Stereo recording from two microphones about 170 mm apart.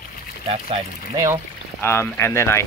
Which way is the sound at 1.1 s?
20° right (ahead or behind).